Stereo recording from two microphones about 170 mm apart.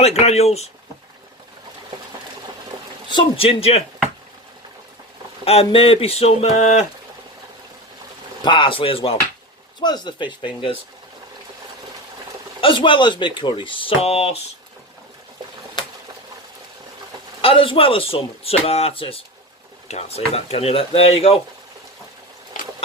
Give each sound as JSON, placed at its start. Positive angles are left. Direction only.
{"t": 0.0, "sound": "speech", "side_deg": 40}
{"t": 3.1, "sound": "speech", "side_deg": 30}
{"t": 5.5, "sound": "speech", "side_deg": 35}
{"t": 8.4, "sound": "speech", "side_deg": 30}
{"t": 12.6, "sound": "speech", "side_deg": 30}
{"t": 17.4, "sound": "speech", "side_deg": 30}
{"t": 22.5, "sound": "a sound", "side_deg": 50}